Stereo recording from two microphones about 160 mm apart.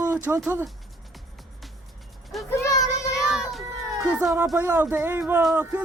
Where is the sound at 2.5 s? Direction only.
20° left (ahead or behind).